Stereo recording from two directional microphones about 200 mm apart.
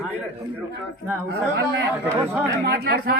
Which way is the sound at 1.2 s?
60° right (ahead or behind).